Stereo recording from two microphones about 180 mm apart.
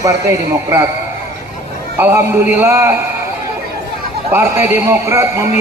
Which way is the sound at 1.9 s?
15° right (ahead or behind).